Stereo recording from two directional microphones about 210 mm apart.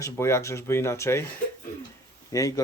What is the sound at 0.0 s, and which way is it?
Speech, 15° left (ahead or behind).